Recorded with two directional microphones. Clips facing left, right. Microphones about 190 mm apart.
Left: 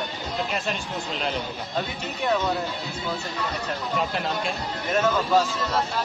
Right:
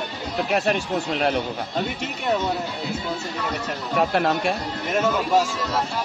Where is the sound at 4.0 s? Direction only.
65° right (ahead or behind).